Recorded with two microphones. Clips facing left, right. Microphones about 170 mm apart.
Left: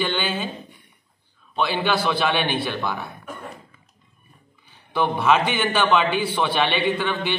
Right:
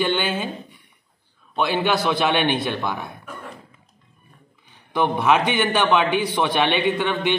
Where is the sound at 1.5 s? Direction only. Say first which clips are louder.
Right 2 dB; 15° right (ahead or behind).